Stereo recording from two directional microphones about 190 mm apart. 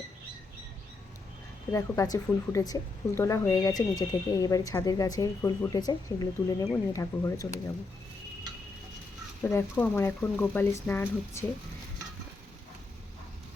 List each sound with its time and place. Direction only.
1.7 s speech: 15° left (ahead or behind)
9.5 s speech: 10° left (ahead or behind)